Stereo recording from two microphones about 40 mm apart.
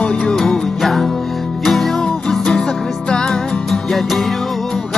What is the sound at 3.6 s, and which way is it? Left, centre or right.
Music, centre.